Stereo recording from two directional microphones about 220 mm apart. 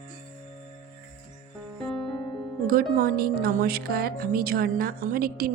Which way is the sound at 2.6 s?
40° right (ahead or behind).